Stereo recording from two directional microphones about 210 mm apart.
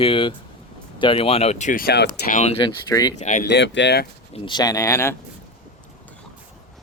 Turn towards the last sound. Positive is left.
turn(degrees=15)  # may be behind; listen again after turning